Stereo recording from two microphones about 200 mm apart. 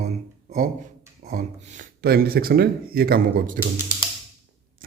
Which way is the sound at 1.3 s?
35° right (ahead or behind).